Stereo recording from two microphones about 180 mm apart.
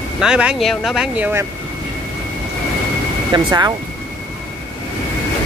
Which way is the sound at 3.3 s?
20° right (ahead or behind).